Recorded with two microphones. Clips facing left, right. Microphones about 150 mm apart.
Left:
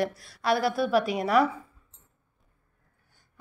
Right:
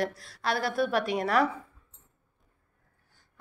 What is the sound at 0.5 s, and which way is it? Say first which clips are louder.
Speech: left 4 dB; 45° right (ahead or behind).